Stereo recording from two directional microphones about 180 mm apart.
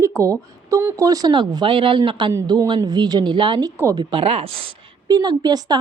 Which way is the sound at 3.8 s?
15° right (ahead or behind).